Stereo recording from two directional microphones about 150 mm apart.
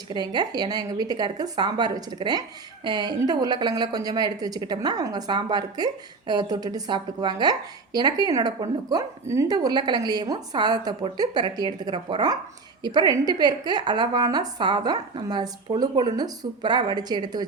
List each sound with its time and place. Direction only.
0.1 s a woman's voice: 30° right (ahead or behind)